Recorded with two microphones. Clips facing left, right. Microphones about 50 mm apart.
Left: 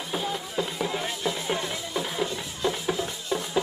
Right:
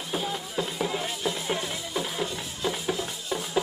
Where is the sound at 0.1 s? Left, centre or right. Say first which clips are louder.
Even; centre.